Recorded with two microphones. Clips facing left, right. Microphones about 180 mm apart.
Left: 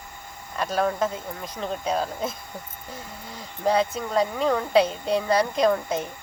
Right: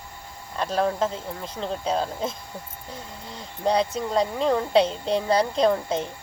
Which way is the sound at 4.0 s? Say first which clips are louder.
Even; 25° right (ahead or behind).